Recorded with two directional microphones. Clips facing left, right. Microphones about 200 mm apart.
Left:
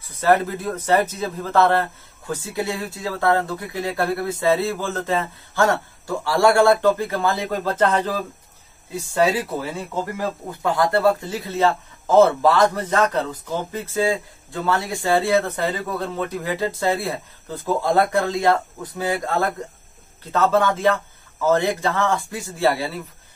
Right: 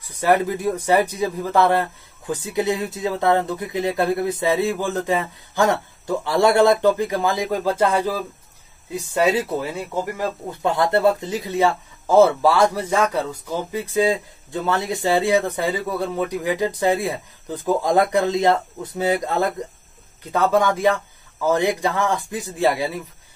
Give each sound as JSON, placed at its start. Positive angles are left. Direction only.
{"t": 0.0, "sound": "speech", "side_deg": -15}
{"t": 8.9, "sound": "speech", "side_deg": -20}